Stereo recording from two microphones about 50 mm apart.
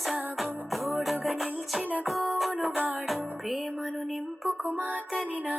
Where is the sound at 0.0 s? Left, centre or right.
Centre.